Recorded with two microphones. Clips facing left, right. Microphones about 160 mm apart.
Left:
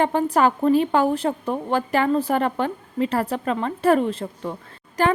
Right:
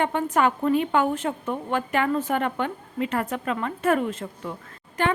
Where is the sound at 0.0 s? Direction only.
35° left (ahead or behind).